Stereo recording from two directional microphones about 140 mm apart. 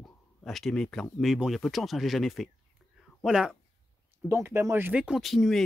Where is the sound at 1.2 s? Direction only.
5° right (ahead or behind).